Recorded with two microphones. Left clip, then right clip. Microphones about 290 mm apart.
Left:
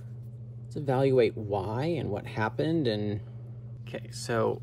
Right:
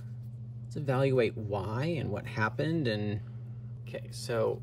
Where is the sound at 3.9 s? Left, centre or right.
Centre.